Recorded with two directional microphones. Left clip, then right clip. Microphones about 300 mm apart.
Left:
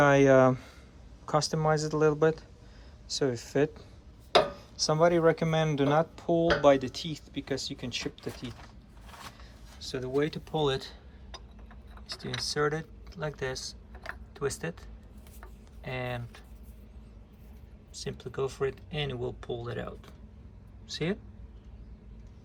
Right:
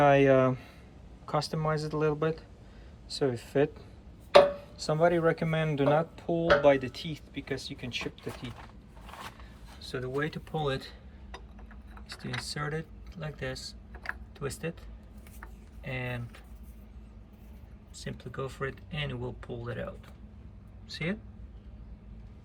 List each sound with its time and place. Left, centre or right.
0.0 s speech: centre
9.8 s speech: centre
12.5 s speech: centre
14.0 s typing: centre
15.9 s speech: centre
18.2 s speech: centre
20.9 s speech: centre